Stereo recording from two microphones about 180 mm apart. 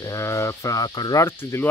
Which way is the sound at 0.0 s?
15° left (ahead or behind).